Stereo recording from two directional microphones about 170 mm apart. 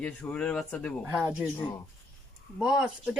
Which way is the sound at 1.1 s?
10° right (ahead or behind).